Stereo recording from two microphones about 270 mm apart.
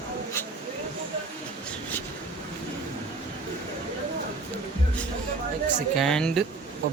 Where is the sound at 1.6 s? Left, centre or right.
Centre.